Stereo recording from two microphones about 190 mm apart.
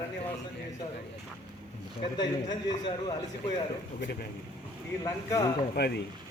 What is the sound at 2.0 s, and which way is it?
Speech, 20° left (ahead or behind).